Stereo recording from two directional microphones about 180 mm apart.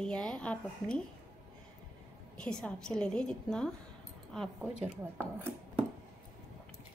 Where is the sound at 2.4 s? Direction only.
5° left (ahead or behind).